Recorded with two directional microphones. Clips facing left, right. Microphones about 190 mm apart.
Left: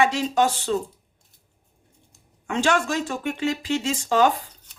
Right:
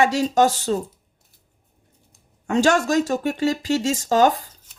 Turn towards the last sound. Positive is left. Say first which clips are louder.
# right 3 dB
turn(degrees=-40)  # may be behind; listen again after turning